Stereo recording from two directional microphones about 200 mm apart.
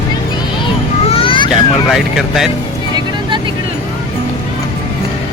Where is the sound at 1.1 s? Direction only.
25° left (ahead or behind).